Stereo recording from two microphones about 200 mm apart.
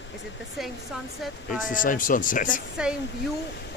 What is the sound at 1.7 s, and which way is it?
Speech, 40° left (ahead or behind).